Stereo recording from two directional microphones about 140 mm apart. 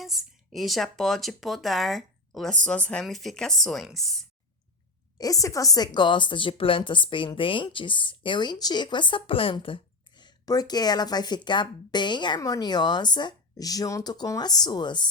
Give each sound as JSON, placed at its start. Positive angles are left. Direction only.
{"t": 0.0, "sound": "speech", "side_deg": 0}
{"t": 5.1, "sound": "a woman's voice", "side_deg": 25}